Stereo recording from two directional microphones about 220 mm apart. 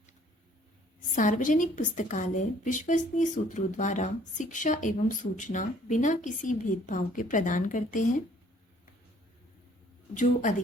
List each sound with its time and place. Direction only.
1.1 s speech: 35° left (ahead or behind)